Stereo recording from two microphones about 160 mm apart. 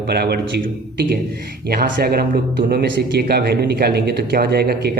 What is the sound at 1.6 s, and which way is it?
A man's voice, 70° right (ahead or behind).